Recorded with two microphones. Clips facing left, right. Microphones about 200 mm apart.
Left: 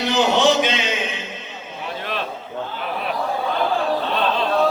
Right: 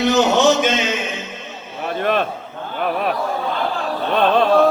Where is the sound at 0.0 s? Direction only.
45° right (ahead or behind).